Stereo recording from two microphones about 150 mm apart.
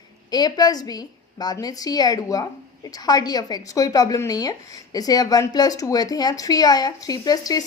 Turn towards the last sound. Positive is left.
turn(degrees=25)  # may be behind; listen again after turning